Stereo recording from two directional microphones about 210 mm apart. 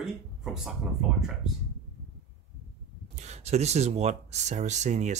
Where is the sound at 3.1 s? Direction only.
30° right (ahead or behind).